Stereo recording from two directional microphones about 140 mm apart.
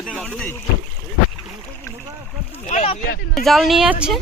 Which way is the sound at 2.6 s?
50° left (ahead or behind).